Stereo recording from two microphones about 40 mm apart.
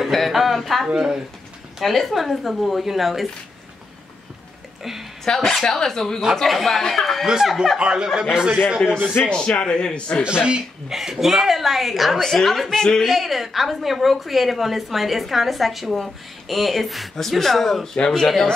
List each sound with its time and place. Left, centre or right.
0.0 s a sound: centre
0.9 s speech: centre
1.8 s a woman's voice: centre
5.2 s a woman's voice: centre
7.8 s speech: right
9.3 s a man's voice: centre
10.2 s speech: right
10.9 s a woman's voice: centre
12.7 s speech: centre
13.1 s a woman's voice: centre
17.9 s a man's voice: centre
18.2 s a woman's voice: centre